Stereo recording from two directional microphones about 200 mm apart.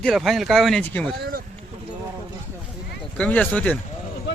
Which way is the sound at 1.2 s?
45° right (ahead or behind).